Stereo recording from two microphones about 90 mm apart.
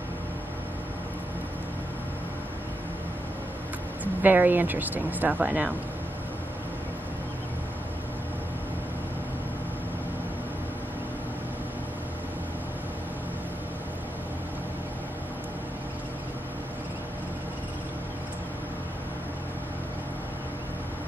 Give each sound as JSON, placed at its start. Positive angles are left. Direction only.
{"t": 4.0, "sound": "speech", "side_deg": -20}